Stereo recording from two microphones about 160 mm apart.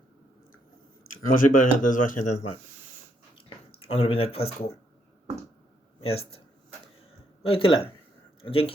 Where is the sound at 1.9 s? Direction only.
45° left (ahead or behind).